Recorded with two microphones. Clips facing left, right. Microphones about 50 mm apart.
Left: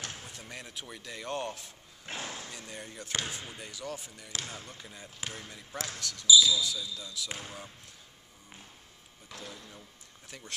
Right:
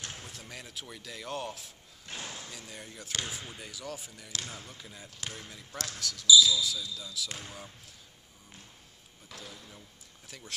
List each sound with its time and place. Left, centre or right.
0.2 s speech: centre
2.0 s a sound: left
2.5 s speech: centre
9.3 s speech: centre